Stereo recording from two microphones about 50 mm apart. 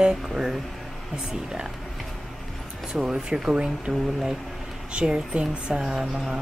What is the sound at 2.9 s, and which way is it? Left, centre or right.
Speech, centre.